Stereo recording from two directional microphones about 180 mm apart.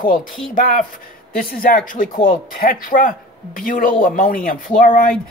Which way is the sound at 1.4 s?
55° left (ahead or behind).